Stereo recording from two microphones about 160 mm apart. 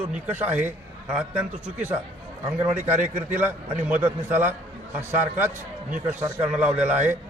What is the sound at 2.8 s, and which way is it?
Speech, 50° right (ahead or behind).